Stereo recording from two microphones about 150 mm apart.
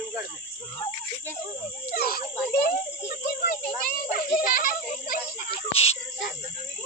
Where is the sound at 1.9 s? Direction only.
90° left.